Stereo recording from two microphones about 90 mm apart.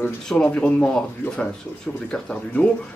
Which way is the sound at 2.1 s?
10° left (ahead or behind).